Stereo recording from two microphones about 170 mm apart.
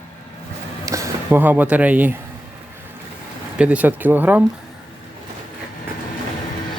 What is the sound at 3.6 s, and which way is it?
Speech, 10° right (ahead or behind).